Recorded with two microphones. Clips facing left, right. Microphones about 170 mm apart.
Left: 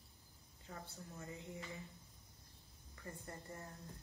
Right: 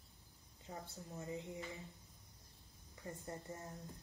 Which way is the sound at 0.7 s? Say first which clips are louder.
Right 2 dB; 20° right (ahead or behind).